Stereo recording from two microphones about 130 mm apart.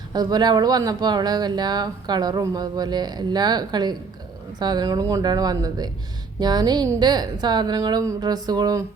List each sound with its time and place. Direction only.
0.1 s speech: 30° right (ahead or behind)